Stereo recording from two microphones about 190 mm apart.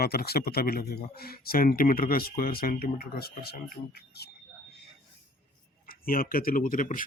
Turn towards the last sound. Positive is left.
turn(degrees=45)  # may be behind; listen again after turning